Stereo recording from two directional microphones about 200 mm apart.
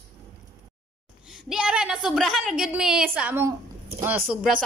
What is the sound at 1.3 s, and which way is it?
A woman's voice, 5° right (ahead or behind).